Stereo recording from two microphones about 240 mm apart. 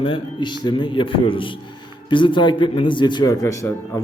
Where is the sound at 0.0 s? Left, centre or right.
Left.